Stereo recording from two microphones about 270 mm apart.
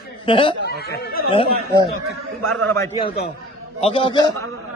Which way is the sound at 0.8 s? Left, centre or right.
Left.